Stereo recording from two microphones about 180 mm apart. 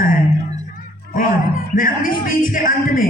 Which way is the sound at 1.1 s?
50° left (ahead or behind).